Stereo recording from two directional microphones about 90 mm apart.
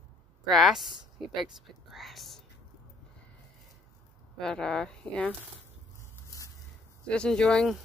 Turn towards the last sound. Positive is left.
turn(degrees=10)  # may be behind; listen again after turning